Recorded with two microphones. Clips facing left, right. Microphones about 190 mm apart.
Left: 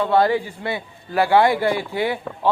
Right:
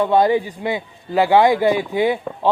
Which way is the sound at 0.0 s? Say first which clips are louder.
Right 2 dB; 20° right (ahead or behind).